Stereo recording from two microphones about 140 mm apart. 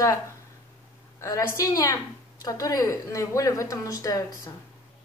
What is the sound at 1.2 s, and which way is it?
A woman's voice, 25° left (ahead or behind).